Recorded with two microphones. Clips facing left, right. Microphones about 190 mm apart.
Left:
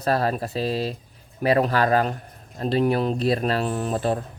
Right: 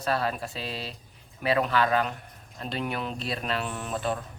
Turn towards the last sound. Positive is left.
turn(degrees=40)  # may be behind; listen again after turning